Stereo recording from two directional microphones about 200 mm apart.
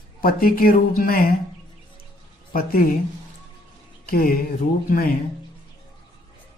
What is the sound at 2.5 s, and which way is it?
Speech, 45° left (ahead or behind).